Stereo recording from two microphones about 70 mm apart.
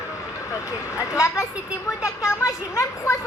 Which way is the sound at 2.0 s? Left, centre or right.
Left.